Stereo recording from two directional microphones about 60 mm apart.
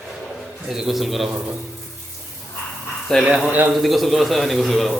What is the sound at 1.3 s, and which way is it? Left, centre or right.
Speech, centre.